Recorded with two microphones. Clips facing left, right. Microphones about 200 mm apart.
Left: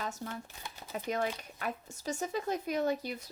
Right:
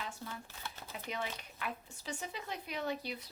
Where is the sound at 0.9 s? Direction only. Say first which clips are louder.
Left 8 dB; 45° left (ahead or behind).